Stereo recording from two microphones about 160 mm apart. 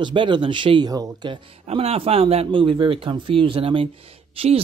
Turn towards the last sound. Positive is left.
turn(degrees=-35)  # may be behind; listen again after turning